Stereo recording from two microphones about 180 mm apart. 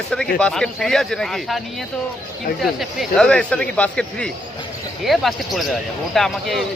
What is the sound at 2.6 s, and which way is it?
Speech, centre (ahead or behind).